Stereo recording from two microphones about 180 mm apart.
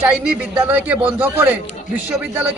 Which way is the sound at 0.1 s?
10° right (ahead or behind).